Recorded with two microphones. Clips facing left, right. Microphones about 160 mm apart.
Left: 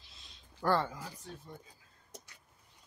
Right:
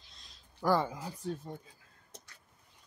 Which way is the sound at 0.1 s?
Centre (ahead or behind).